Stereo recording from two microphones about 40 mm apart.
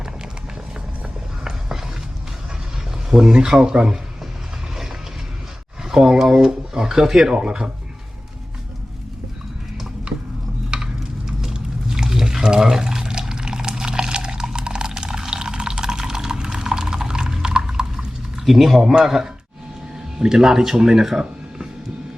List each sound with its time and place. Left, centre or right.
3.1 s speech: centre
5.8 s a sound: centre
7.3 s speech: centre
10.7 s a sound: right
11.3 s liquid: centre
18.4 s speech: centre